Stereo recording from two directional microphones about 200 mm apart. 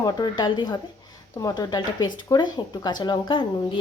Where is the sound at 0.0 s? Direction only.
20° left (ahead or behind).